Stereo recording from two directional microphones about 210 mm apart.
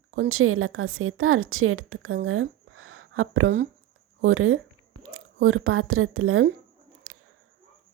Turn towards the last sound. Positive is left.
turn(degrees=-90)